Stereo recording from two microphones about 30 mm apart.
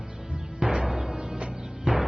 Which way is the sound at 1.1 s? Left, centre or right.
Right.